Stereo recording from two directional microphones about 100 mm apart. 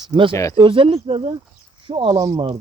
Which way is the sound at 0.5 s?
55° right (ahead or behind).